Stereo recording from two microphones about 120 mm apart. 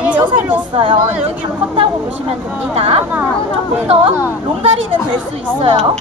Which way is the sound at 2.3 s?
55° right (ahead or behind).